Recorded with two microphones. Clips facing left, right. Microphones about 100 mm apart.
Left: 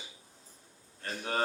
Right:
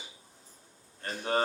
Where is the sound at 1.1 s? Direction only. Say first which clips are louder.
Right 3 dB; 35° right (ahead or behind).